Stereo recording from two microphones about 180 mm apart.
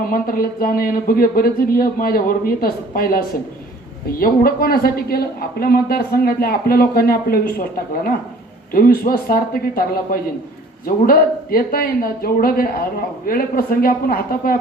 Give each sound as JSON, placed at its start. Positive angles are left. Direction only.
{"t": 0.0, "sound": "speech", "side_deg": 55}
{"t": 4.2, "sound": "speech", "side_deg": 55}
{"t": 8.7, "sound": "speech", "side_deg": 55}